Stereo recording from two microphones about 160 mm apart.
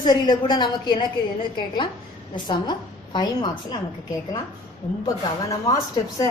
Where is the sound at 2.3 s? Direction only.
25° left (ahead or behind).